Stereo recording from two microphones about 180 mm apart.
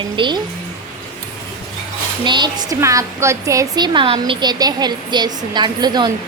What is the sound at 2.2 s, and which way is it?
A woman's voice, 25° right (ahead or behind).